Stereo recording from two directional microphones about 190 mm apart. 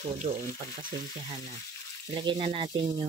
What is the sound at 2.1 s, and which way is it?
Speech, 25° right (ahead or behind).